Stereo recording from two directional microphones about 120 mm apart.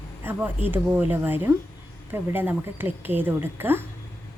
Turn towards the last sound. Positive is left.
turn(degrees=-15)  # may be behind; listen again after turning